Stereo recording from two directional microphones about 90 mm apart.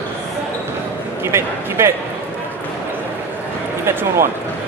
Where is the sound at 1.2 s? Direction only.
30° right (ahead or behind).